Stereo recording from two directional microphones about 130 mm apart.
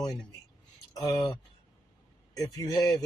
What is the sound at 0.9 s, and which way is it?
Speech, 30° left (ahead or behind).